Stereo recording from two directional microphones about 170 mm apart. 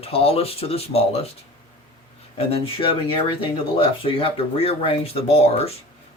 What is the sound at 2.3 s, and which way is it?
Speech, 35° left (ahead or behind).